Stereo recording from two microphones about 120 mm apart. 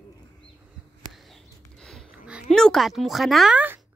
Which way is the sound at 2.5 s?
5° left (ahead or behind).